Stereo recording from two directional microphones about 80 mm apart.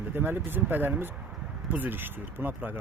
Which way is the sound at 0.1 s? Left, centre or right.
Right.